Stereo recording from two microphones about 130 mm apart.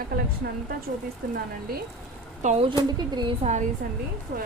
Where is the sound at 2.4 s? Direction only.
55° right (ahead or behind).